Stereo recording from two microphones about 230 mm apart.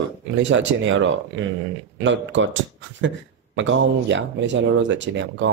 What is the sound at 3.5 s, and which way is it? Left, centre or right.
Speech, right.